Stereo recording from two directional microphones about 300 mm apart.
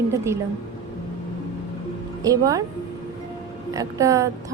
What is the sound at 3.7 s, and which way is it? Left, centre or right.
Speech, centre.